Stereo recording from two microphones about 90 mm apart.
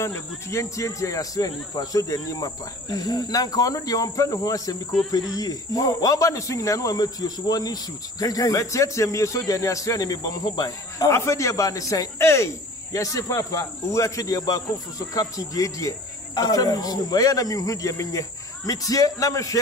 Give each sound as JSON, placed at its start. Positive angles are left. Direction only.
{"t": 0.0, "sound": "cricket", "side_deg": 35}